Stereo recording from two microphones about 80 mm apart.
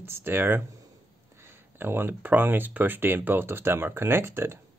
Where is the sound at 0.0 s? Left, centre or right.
Right.